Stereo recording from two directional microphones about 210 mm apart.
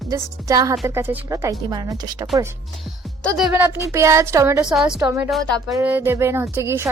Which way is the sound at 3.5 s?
10° right (ahead or behind).